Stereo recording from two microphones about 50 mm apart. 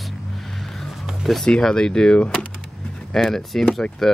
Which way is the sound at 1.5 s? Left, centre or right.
Centre.